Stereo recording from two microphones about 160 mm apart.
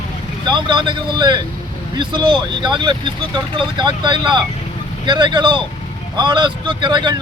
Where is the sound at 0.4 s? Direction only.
30° right (ahead or behind).